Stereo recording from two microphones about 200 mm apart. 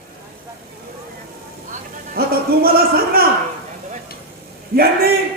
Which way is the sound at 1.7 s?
50° right (ahead or behind).